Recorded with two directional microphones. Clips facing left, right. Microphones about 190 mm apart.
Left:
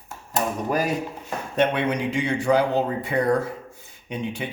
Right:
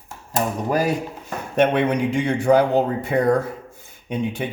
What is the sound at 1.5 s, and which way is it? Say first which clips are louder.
Speech: right 4 dB; 50° right (ahead or behind).